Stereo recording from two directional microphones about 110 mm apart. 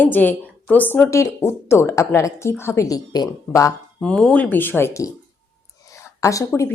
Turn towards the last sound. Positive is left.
turn(degrees=30)  # may be behind; listen again after turning